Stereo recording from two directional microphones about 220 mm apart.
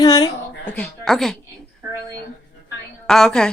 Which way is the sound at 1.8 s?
10° right (ahead or behind).